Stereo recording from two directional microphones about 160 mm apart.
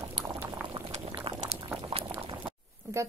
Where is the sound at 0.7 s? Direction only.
30° right (ahead or behind).